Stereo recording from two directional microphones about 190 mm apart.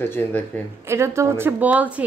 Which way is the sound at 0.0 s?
10° left (ahead or behind).